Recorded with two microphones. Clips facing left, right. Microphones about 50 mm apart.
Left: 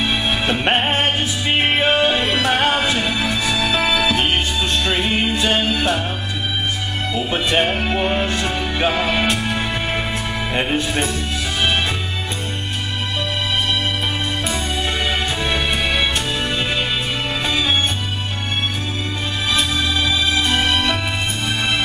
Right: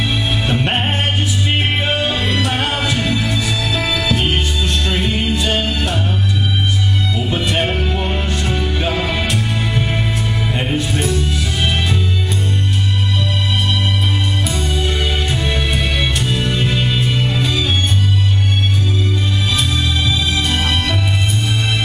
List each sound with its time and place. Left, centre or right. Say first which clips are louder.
0.5 s music: left 1 dB; left
7.2 s music: left 2 dB; left
15.5 s music: even; left
20.1 s music: even; left